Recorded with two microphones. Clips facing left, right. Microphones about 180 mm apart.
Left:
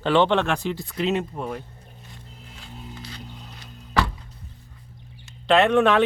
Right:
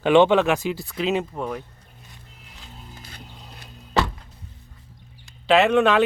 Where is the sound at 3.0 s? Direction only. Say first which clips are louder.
Left 4 dB; 55° right (ahead or behind).